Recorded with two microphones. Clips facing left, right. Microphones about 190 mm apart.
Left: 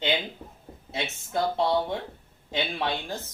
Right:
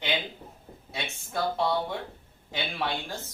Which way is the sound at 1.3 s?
20° left (ahead or behind).